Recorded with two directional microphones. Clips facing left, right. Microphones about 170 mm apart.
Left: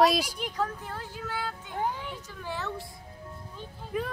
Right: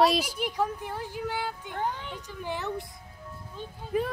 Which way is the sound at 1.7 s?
5° left (ahead or behind).